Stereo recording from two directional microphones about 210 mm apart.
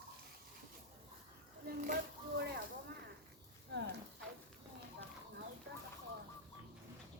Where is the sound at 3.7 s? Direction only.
55° right (ahead or behind).